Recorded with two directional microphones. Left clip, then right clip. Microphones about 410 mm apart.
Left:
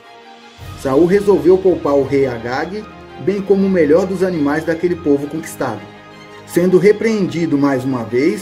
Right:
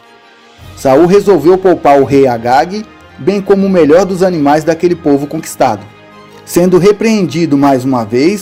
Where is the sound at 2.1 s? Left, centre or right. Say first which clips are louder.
Right 9 dB; centre.